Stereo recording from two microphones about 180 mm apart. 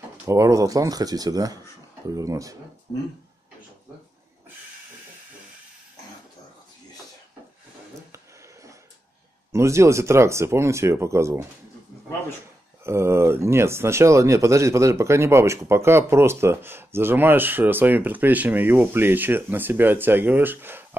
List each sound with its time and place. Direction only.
0.2 s speech: 15° right (ahead or behind)
9.5 s speech: 15° right (ahead or behind)
12.8 s speech: 15° right (ahead or behind)